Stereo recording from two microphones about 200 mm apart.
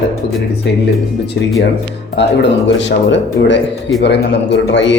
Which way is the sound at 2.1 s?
60° left (ahead or behind).